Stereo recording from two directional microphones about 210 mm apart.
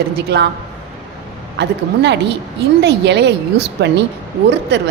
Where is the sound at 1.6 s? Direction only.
55° right (ahead or behind).